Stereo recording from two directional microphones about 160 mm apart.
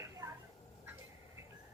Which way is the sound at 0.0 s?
20° right (ahead or behind).